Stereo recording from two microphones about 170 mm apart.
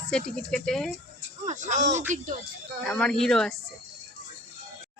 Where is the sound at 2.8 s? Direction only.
5° left (ahead or behind).